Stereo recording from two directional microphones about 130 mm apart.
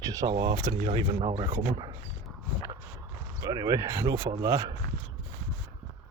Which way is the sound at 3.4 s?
30° right (ahead or behind).